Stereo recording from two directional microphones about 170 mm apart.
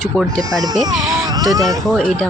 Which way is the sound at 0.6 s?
25° right (ahead or behind).